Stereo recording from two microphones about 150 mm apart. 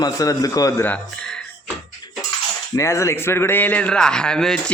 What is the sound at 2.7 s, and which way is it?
A man's voice, 20° left (ahead or behind).